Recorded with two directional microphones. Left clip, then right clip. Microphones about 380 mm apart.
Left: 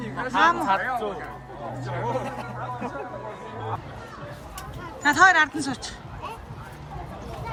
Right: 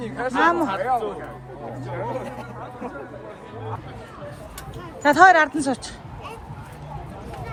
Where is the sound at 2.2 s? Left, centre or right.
Left.